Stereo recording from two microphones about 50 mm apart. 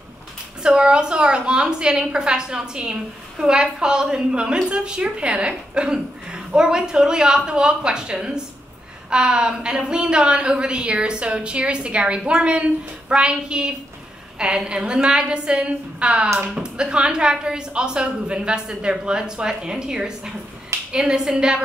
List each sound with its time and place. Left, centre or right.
0.6 s a woman's voice: centre